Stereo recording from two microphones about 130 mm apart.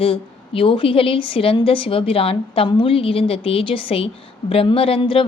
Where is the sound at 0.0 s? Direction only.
45° left (ahead or behind).